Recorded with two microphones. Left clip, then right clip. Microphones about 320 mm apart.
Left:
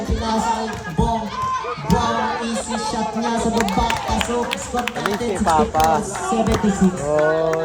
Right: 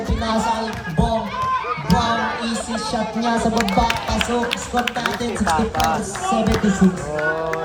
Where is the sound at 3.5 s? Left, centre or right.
Left.